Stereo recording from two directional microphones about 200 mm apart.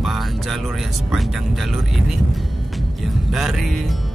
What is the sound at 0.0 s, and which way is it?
Speech, centre (ahead or behind).